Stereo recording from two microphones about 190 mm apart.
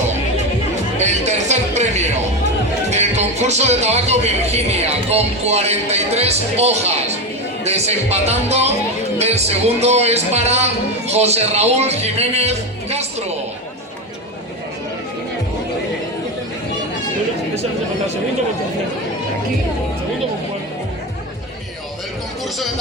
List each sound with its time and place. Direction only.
0.9 s music: 35° right (ahead or behind)